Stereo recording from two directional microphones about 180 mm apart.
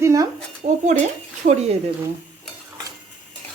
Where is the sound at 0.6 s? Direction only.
40° right (ahead or behind).